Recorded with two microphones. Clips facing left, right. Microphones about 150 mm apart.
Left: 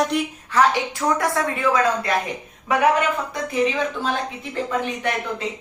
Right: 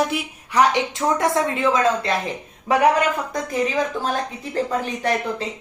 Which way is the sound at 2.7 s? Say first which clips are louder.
Right 2 dB; 30° right (ahead or behind).